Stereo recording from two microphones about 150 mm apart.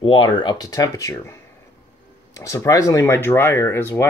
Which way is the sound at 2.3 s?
20° left (ahead or behind).